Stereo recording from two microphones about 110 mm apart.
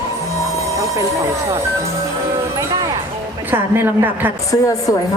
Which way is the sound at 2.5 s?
30° right (ahead or behind).